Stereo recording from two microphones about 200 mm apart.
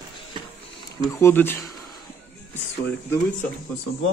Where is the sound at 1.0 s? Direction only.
15° left (ahead or behind).